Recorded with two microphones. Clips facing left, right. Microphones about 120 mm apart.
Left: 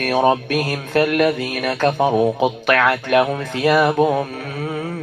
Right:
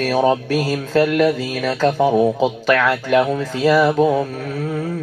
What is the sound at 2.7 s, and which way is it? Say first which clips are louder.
Speech: right 1 dB; 65° left (ahead or behind).